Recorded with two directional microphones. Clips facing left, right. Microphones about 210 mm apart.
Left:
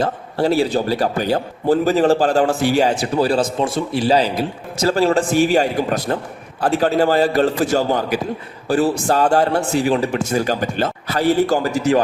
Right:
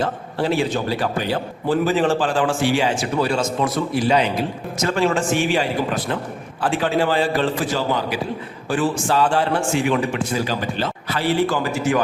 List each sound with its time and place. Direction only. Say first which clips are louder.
0.0 s a man's voice: left 3 dB; 40° left (ahead or behind)